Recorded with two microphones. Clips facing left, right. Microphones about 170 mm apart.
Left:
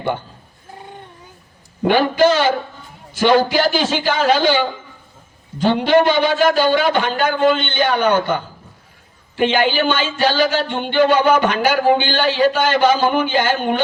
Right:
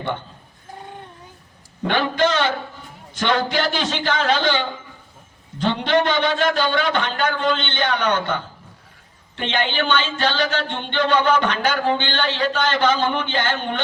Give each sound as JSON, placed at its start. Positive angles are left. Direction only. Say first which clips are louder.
{"t": 2.1, "sound": "speech", "louder": "left 5 dB", "side_deg": 5}
{"t": 5.5, "sound": "a man's voice", "louder": "left 5 dB", "side_deg": 5}